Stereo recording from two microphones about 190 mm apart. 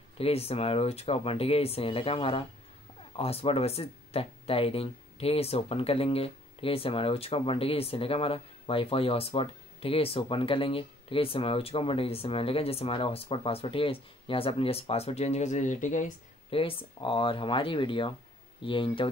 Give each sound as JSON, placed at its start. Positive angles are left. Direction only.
{"t": 0.2, "sound": "speech", "side_deg": 30}